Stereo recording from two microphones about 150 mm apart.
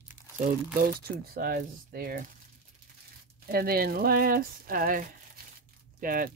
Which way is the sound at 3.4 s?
90° right.